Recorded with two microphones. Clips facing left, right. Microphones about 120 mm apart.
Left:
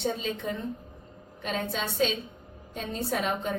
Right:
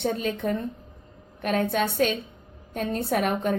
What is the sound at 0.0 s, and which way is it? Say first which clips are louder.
A woman's voice: right 4 dB; 55° right (ahead or behind).